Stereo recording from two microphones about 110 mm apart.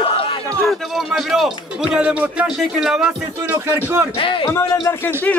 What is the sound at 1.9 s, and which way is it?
Speech, 10° right (ahead or behind).